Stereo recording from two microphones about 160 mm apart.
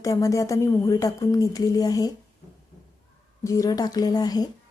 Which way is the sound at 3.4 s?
20° left (ahead or behind).